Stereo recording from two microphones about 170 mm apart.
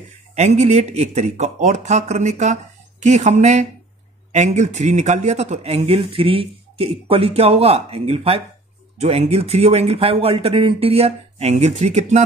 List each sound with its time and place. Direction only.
0.3 s speech: 40° right (ahead or behind)